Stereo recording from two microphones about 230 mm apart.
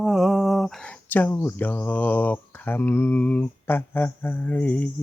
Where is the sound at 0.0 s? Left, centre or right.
Centre.